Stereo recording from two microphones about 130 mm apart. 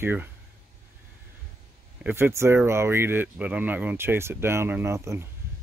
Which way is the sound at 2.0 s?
15° right (ahead or behind).